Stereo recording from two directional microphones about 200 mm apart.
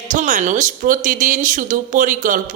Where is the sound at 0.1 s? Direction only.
40° right (ahead or behind).